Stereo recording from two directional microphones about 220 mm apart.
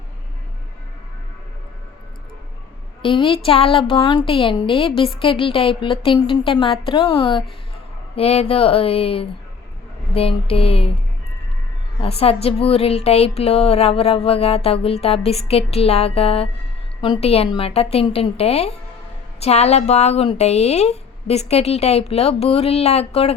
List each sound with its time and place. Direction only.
3.0 s a woman's voice: 20° left (ahead or behind)
11.9 s a woman's voice: 25° left (ahead or behind)